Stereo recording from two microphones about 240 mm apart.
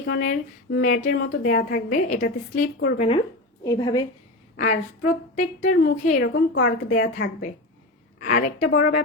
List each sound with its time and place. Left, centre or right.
0.1 s a woman's voice: left
3.6 s a woman's voice: centre
4.5 s a woman's voice: left